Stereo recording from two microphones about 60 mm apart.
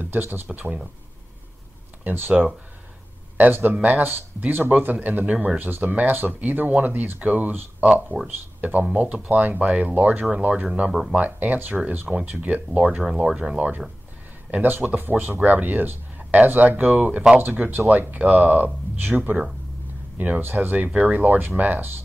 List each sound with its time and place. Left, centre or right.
0.0 s speech: right
2.0 s speech: right
10.9 s speech: centre
11.1 s speech: right
14.5 s speech: right